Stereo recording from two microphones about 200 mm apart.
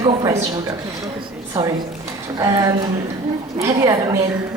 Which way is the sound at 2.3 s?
20° right (ahead or behind).